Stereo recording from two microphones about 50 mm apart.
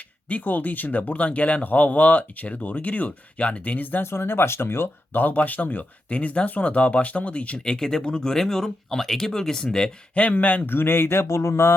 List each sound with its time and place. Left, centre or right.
0.3 s speech: left
4.0 s speech: left
5.1 s speech: left
7.6 s speech: centre
10.2 s speech: left
10.7 s speech: left
11.3 s a sound: left